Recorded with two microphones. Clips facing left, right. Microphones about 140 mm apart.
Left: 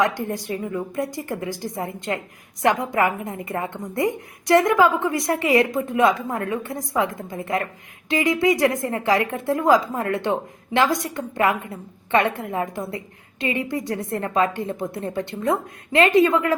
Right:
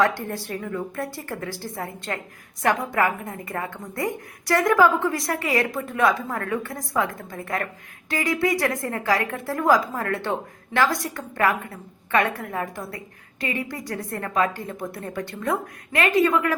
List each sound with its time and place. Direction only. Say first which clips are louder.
0.0 s a woman's voice: even; 20° left (ahead or behind)